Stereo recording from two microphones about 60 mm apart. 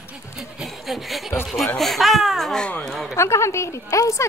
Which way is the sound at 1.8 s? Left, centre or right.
Centre.